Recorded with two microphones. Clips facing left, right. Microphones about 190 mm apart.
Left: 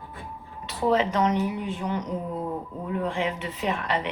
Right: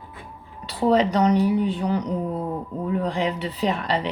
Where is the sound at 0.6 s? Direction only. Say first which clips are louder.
Right 4 dB; 35° right (ahead or behind).